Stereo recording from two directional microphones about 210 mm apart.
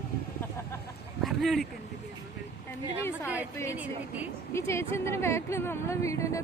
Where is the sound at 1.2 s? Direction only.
Centre (ahead or behind).